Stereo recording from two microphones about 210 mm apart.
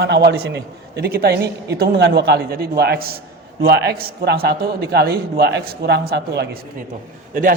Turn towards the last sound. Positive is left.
turn(degrees=-40)  # may be behind; listen again after turning